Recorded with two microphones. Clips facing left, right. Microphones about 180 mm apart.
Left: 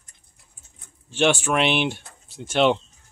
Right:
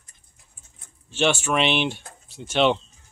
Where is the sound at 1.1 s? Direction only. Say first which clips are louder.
Left 2 dB; 15° left (ahead or behind).